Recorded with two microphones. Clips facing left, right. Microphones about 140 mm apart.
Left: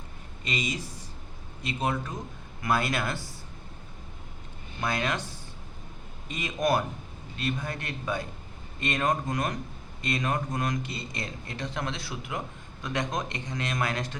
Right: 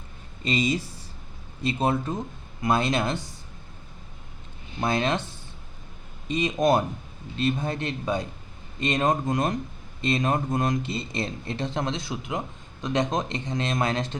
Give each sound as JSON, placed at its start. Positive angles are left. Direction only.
{"t": 0.4, "sound": "speech", "side_deg": -30}
{"t": 4.8, "sound": "speech", "side_deg": -25}